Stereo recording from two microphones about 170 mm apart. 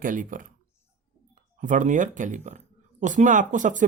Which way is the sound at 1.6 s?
50° right (ahead or behind).